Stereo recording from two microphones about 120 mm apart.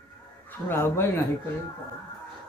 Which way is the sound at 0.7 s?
20° left (ahead or behind).